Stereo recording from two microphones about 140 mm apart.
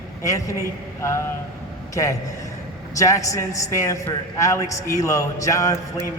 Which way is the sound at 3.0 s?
25° left (ahead or behind).